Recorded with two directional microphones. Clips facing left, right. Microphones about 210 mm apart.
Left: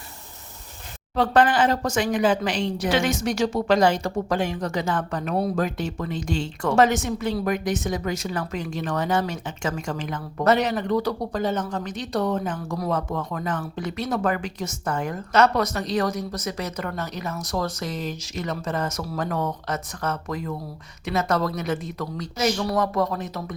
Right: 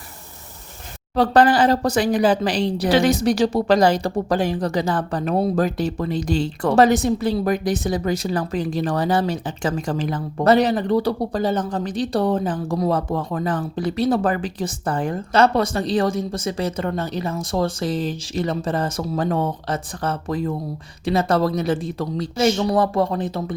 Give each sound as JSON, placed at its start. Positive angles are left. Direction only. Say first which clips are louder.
{"t": 1.1, "sound": "speech", "louder": "right 4 dB", "side_deg": -35}